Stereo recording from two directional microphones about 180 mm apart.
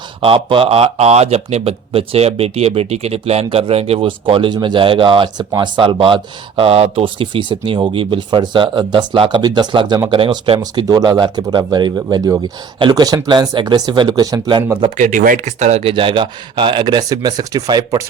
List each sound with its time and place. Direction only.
0.2 s speech: 30° right (ahead or behind)
14.9 s speech: 50° right (ahead or behind); by 18.0 s 20° right (ahead or behind)